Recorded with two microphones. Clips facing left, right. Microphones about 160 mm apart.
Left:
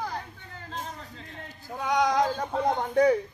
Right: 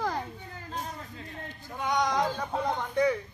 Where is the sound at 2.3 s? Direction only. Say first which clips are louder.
Left 3 dB; 45° left (ahead or behind).